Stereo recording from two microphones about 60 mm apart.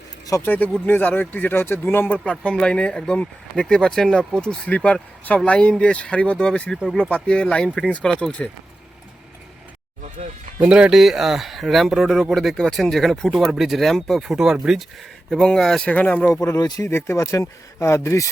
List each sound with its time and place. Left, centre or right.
0.4 s speech: left
1.5 s speech: left
2.3 s speech: centre
10.6 s speech: centre
10.9 s speech: centre
14.3 s speech: centre
15.3 s speech: centre
15.9 s speech: left
16.3 s speech: left
17.2 s speech: left